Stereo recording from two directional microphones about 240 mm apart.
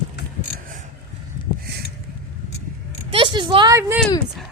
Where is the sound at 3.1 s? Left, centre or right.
Right.